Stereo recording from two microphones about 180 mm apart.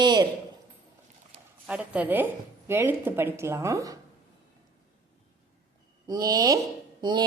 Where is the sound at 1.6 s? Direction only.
5° right (ahead or behind).